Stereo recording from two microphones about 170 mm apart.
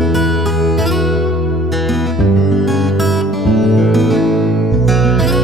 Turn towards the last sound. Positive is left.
turn(degrees=0)  # may be behind; listen again after turning